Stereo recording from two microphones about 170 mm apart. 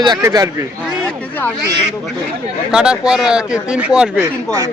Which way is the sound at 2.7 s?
5° right (ahead or behind).